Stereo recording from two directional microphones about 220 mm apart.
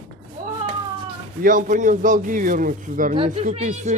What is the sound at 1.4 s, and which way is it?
Speech, 35° right (ahead or behind).